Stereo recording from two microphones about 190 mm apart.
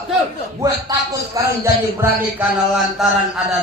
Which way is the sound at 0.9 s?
20° right (ahead or behind).